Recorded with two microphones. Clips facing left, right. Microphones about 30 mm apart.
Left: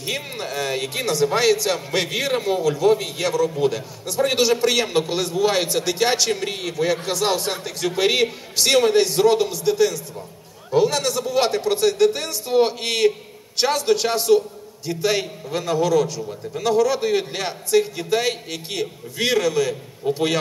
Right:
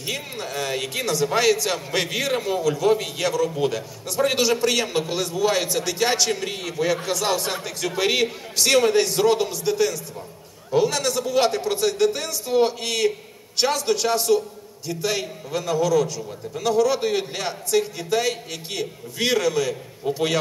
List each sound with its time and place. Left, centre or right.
0.5 s a man's voice: centre
0.8 s a man's voice: left
1.7 s a man's voice: centre
2.1 s a man's voice: centre
4.6 s a man's voice: centre
10.7 s a man's voice: centre
12.3 s a man's voice: left
16.8 s a man's voice: centre
17.2 s a man's voice: left
19.3 s a man's voice: centre